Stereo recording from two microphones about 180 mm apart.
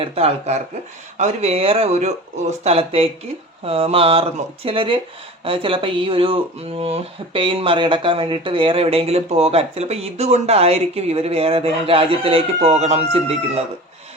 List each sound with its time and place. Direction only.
0.0 s speech: 30° right (ahead or behind)